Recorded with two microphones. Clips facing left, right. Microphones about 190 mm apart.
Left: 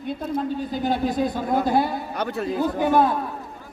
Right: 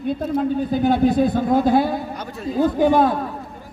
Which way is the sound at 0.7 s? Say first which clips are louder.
Right 7 dB; 55° right (ahead or behind).